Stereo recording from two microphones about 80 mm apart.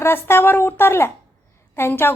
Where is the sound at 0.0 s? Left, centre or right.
Left.